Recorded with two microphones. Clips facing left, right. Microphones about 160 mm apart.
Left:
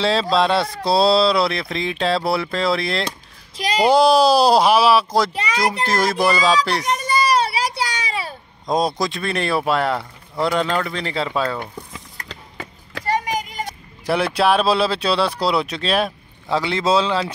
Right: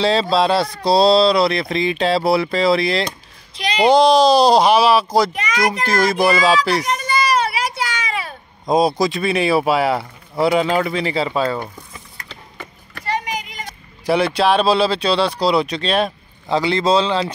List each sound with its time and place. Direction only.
0.0 s speech: centre (ahead or behind)
5.3 s a child's voice: 30° left (ahead or behind)
5.9 s speech: centre (ahead or behind)
7.1 s a sound: 35° left (ahead or behind)
8.6 s speech: 5° right (ahead or behind)
13.0 s a sound: 45° left (ahead or behind)
14.0 s speech: centre (ahead or behind)